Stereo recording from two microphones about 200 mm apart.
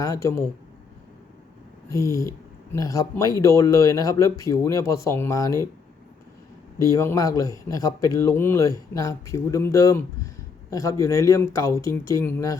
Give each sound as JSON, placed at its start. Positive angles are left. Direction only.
{"t": 0.0, "sound": "speech", "side_deg": 15}
{"t": 1.9, "sound": "speech", "side_deg": 15}
{"t": 6.7, "sound": "speech", "side_deg": 15}